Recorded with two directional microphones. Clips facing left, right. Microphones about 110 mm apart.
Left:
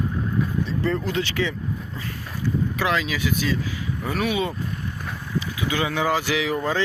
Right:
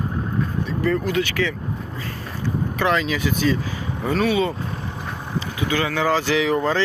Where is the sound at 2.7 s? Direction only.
Centre (ahead or behind).